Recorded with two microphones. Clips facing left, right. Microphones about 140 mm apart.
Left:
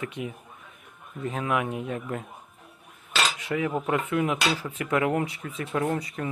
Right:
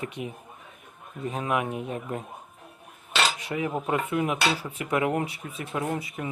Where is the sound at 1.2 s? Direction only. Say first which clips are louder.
Even; 20° right (ahead or behind).